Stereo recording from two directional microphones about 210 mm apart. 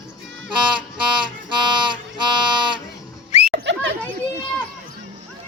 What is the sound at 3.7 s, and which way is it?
Children playing, 55° right (ahead or behind).